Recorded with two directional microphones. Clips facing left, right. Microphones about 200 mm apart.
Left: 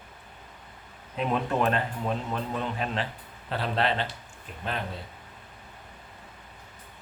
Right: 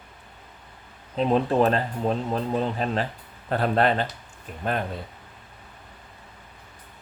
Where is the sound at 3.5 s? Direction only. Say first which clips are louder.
Right 6 dB; 50° right (ahead or behind).